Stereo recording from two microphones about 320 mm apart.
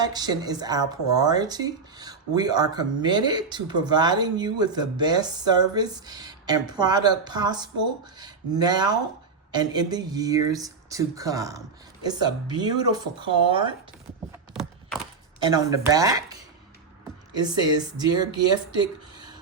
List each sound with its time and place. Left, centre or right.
0.0 s speech: centre
14.5 s a sound: centre
15.4 s speech: centre